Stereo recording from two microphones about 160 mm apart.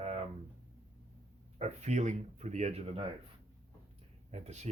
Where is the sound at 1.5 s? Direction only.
45° right (ahead or behind).